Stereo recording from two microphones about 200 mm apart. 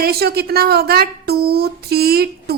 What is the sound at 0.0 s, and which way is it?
A woman's voice, 50° right (ahead or behind).